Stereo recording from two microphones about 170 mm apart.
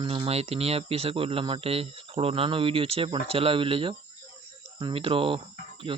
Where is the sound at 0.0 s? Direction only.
30° right (ahead or behind).